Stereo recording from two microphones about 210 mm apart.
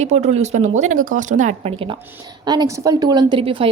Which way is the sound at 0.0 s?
30° right (ahead or behind).